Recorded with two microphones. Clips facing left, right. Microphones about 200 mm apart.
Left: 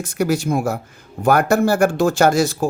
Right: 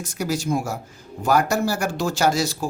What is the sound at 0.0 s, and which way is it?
Speech, 55° left (ahead or behind).